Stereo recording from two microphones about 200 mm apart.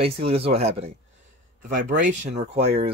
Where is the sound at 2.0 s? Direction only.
35° right (ahead or behind).